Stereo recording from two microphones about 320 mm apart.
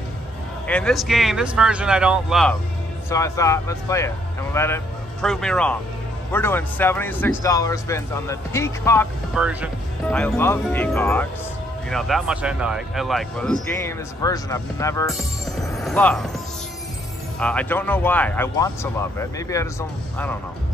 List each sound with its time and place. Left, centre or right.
0.7 s speech: centre
9.3 s speech: centre
17.4 s speech: centre